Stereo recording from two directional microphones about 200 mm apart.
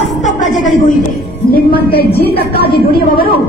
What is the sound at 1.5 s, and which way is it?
A man's voice, 45° left (ahead or behind).